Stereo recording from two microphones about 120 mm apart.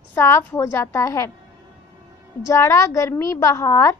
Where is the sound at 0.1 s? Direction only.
20° left (ahead or behind).